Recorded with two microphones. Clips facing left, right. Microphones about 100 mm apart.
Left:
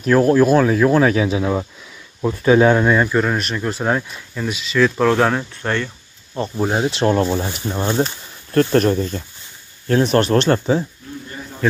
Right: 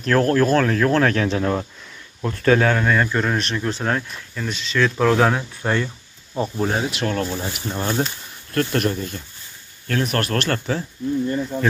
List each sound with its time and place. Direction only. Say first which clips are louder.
0.0 s speech: left 4 dB; 10° left (ahead or behind)
6.5 s speech: left 4 dB; 10° left (ahead or behind)
6.8 s speech: left 6 dB; 30° left (ahead or behind)
8.0 s speech: left 4 dB; 30° left (ahead or behind)
9.8 s speech: left 7 dB; 25° left (ahead or behind)